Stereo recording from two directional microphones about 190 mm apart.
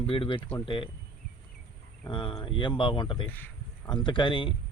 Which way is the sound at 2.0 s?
25° left (ahead or behind).